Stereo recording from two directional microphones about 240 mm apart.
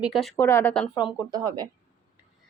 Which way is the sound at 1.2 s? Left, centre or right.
Centre.